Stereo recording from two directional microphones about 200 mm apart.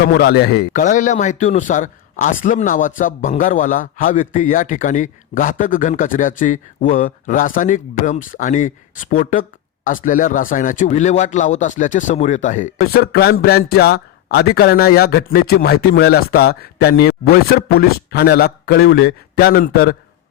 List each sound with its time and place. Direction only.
0.0 s a man's voice: 50° left (ahead or behind)
13.0 s a man's voice: 50° left (ahead or behind)